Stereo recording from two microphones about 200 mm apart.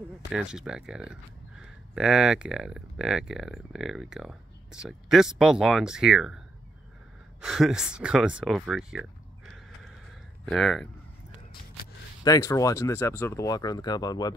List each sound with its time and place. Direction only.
0.3 s speech: 5° right (ahead or behind)
7.4 s speech: centre (ahead or behind)
10.4 s speech: centre (ahead or behind)
12.3 s speech: 15° left (ahead or behind)